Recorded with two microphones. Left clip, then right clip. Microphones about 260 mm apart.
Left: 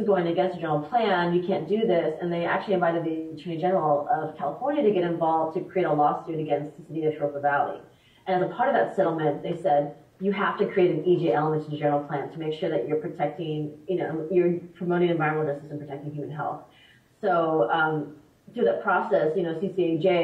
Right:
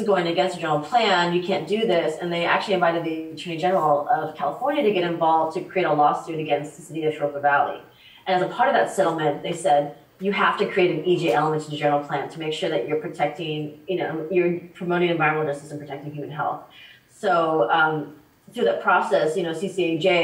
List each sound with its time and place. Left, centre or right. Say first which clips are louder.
0.0 s speech: right 2 dB; centre